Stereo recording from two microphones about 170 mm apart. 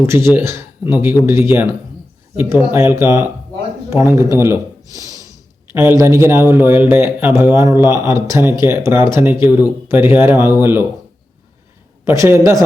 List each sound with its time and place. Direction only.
0.0 s speech: 15° right (ahead or behind)
12.0 s speech: 15° right (ahead or behind)